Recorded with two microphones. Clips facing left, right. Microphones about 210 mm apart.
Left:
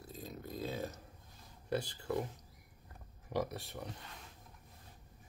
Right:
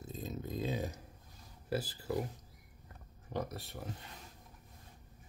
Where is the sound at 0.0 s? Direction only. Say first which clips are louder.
Right 4 dB; 20° right (ahead or behind).